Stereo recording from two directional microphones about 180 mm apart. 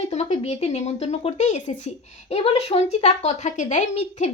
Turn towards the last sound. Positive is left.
turn(degrees=35)  # may be behind; listen again after turning